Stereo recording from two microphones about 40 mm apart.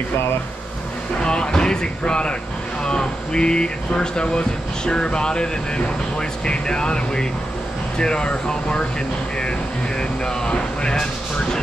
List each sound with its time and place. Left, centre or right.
1.2 s speech: left
9.9 s speech: left